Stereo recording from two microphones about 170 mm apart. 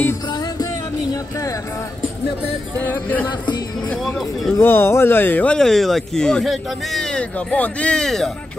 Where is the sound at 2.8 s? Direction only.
10° left (ahead or behind).